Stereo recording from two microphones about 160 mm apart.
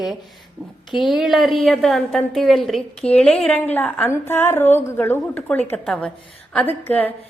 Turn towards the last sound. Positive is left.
turn(degrees=10)  # may be behind; listen again after turning